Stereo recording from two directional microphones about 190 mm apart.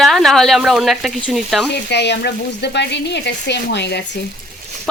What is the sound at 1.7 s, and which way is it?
Speech, 60° left (ahead or behind).